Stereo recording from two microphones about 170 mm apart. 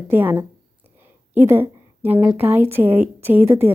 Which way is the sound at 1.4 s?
10° right (ahead or behind).